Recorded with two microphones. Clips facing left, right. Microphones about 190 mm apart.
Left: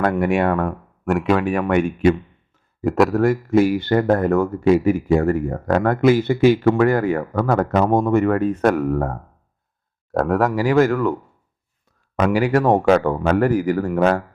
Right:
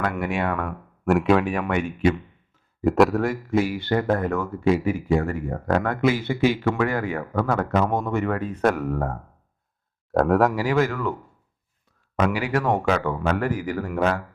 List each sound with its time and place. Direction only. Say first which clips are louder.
0.0 s speech: left 7 dB; 45° left (ahead or behind)
1.0 s speech: left 1 dB; centre (ahead or behind)
1.5 s speech: left 6 dB; 45° left (ahead or behind)
2.8 s speech: left 1 dB; centre (ahead or behind)
3.2 s speech: left 7 dB; 45° left (ahead or behind)
10.1 s speech: even; centre (ahead or behind)
10.6 s speech: left 6 dB; 45° left (ahead or behind)
12.2 s speech: left 6 dB; 40° left (ahead or behind)